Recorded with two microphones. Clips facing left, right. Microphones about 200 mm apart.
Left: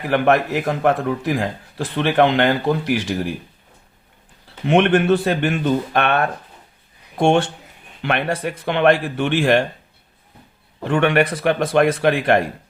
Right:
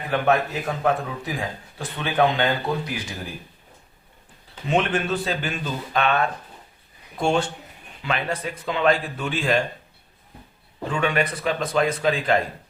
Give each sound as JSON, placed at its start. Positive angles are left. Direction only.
{"t": 0.1, "sound": "speech", "side_deg": 75}
{"t": 4.6, "sound": "speech", "side_deg": 65}
{"t": 7.2, "sound": "speech", "side_deg": 75}
{"t": 10.8, "sound": "speech", "side_deg": 65}